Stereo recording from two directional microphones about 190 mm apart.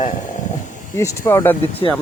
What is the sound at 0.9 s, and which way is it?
Speech, 15° left (ahead or behind).